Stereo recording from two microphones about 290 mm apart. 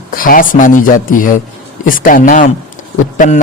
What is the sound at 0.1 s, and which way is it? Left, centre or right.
A man's voice, left.